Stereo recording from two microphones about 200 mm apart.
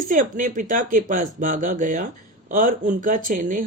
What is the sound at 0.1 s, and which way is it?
Speech, 40° right (ahead or behind).